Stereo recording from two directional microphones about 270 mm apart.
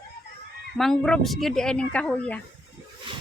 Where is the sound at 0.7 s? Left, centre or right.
Centre.